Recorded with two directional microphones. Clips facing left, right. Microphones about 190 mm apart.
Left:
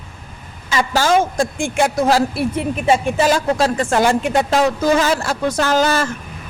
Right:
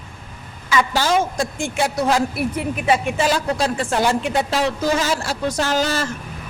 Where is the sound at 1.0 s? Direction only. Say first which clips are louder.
Left 4 dB; 50° left (ahead or behind); by 3.1 s 25° left (ahead or behind).